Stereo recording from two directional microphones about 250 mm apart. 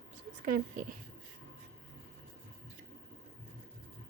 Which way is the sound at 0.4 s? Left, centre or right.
Right.